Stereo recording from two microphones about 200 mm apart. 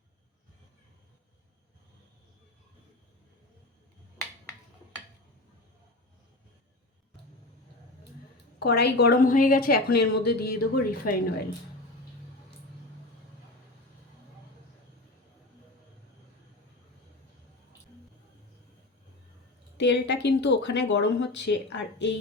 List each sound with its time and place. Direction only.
8.5 s speech: 55° left (ahead or behind)
19.7 s speech: 60° left (ahead or behind)